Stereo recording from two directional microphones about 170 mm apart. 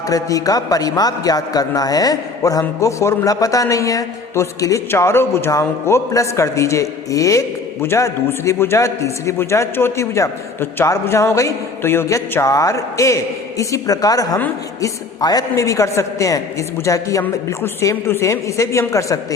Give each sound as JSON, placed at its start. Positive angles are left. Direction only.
{"t": 0.1, "sound": "a man's voice", "side_deg": 20}